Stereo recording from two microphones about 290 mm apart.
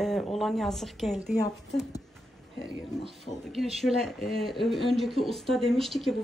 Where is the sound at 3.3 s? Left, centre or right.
Left.